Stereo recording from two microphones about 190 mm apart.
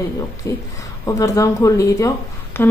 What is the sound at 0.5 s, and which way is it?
Speech, 15° left (ahead or behind).